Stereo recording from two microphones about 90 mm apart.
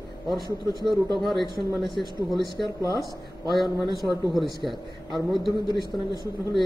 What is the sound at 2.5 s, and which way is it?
Speech, 55° left (ahead or behind).